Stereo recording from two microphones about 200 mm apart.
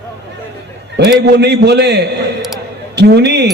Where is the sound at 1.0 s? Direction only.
55° right (ahead or behind).